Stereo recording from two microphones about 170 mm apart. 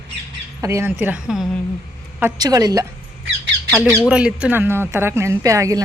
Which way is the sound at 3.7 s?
5° right (ahead or behind).